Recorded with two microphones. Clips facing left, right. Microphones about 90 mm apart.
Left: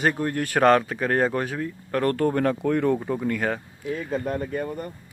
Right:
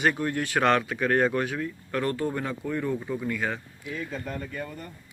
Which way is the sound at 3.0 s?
50° left (ahead or behind).